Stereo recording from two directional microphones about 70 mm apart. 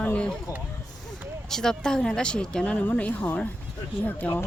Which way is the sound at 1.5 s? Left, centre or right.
Centre.